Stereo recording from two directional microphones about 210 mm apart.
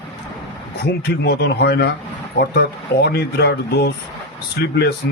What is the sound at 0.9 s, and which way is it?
Speech, 50° left (ahead or behind).